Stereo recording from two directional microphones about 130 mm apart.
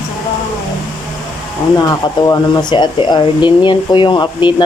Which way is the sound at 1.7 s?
35° left (ahead or behind).